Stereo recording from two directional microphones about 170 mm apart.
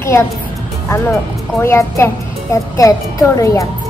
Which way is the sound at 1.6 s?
15° left (ahead or behind).